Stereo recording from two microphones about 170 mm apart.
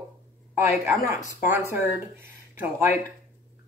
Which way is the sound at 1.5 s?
15° right (ahead or behind).